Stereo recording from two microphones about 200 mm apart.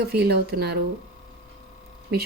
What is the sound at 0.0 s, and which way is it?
Speech, 50° right (ahead or behind).